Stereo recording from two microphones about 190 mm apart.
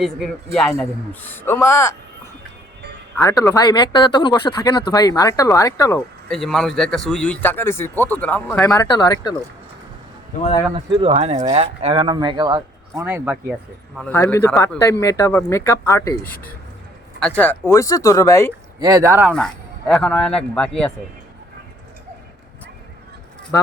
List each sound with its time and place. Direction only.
0.0 s a man's voice: centre (ahead or behind)
3.2 s speech: 20° left (ahead or behind)
6.2 s a man's voice: 5° left (ahead or behind); by 9.3 s 20° left (ahead or behind)
10.8 s speech: 30° right (ahead or behind); by 14.1 s 5° right (ahead or behind)
14.1 s a man's voice: 10° left (ahead or behind)
17.2 s a man's voice: 5° left (ahead or behind)
18.8 s speech: 20° right (ahead or behind)
19.9 s a man's voice: 5° left (ahead or behind)